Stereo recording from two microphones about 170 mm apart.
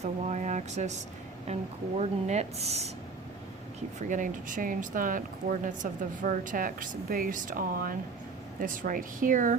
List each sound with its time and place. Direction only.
0.0 s speech: 45° right (ahead or behind)
4.1 s speech: 50° right (ahead or behind)